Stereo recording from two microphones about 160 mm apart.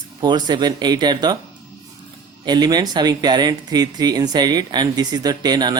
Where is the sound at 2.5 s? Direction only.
25° right (ahead or behind).